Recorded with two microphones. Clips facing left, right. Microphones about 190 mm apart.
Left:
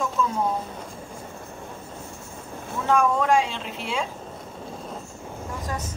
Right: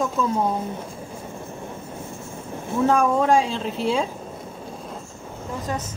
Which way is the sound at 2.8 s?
35° right (ahead or behind).